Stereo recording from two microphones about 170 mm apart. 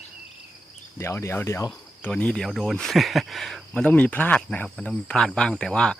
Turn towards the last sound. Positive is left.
turn(degrees=5)  # may be behind; listen again after turning